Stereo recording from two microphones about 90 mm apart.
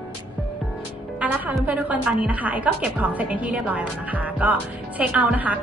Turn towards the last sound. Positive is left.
turn(degrees=-15)  # may be behind; listen again after turning